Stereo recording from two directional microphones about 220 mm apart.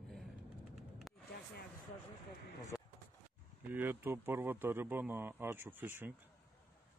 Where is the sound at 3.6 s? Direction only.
10° right (ahead or behind).